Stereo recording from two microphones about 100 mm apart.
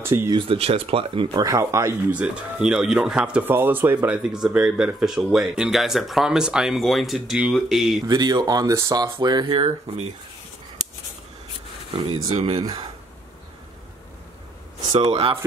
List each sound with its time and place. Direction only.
0.0 s speech: 25° right (ahead or behind)
0.3 s speech: 60° right (ahead or behind)
1.4 s speech: 35° right (ahead or behind)
2.1 s speech: 10° right (ahead or behind)
8.1 s speech: 45° right (ahead or behind); by 10.1 s 80° right
12.1 s speech: 85° right
15.0 s speech: 75° right (ahead or behind)